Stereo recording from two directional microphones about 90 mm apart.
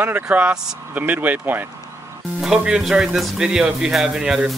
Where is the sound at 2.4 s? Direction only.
10° right (ahead or behind).